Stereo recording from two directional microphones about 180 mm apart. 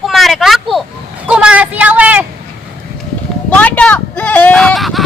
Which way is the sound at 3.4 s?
10° left (ahead or behind).